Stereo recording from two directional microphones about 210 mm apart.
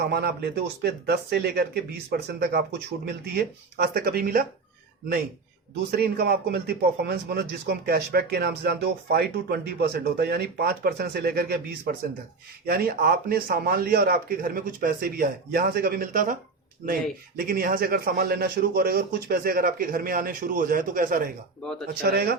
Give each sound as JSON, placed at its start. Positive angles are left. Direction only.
{"t": 0.0, "sound": "speech", "side_deg": -50}
{"t": 6.0, "sound": "speech", "side_deg": -50}
{"t": 21.6, "sound": "speech", "side_deg": 5}
{"t": 22.0, "sound": "speech", "side_deg": -50}